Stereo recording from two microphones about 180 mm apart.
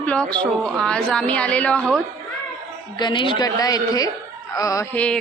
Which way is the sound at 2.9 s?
25° left (ahead or behind).